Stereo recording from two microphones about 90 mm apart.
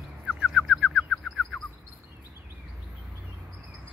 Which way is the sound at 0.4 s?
5° right (ahead or behind).